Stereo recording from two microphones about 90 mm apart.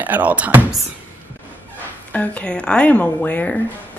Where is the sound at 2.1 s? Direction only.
15° left (ahead or behind).